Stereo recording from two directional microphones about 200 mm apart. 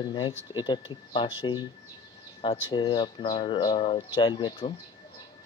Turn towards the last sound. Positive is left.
turn(degrees=25)  # may be behind; listen again after turning